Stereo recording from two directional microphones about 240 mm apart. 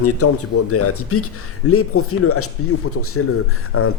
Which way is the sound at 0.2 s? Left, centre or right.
Left.